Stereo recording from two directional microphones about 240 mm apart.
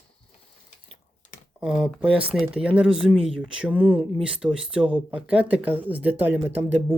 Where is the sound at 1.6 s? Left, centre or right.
Centre.